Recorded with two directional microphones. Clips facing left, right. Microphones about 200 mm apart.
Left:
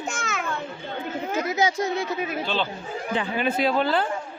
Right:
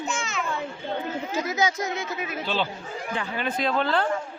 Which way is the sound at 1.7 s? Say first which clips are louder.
Left 4 dB; 30° left (ahead or behind).